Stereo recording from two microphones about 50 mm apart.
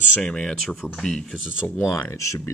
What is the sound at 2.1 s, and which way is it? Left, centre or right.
Speech, left.